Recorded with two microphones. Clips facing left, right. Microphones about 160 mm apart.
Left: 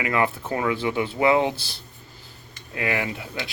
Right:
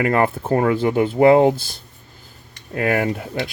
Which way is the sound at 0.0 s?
45° right (ahead or behind).